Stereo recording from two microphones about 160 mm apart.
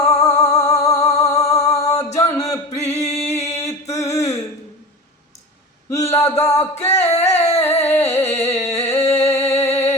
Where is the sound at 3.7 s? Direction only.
20° left (ahead or behind).